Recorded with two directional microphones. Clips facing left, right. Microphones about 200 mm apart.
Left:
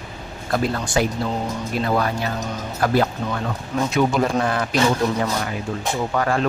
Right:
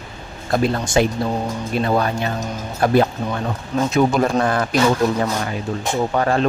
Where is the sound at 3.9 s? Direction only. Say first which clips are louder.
Right 3 dB; 45° right (ahead or behind).